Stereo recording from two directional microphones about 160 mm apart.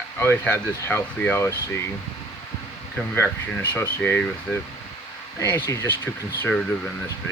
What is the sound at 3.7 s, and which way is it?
Speech, 15° left (ahead or behind).